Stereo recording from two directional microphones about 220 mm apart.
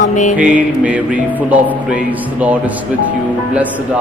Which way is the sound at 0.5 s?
5° right (ahead or behind).